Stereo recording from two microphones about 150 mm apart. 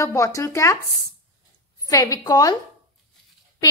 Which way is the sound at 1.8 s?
25° left (ahead or behind).